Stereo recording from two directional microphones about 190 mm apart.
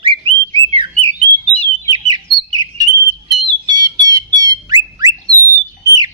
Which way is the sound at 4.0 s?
20° right (ahead or behind).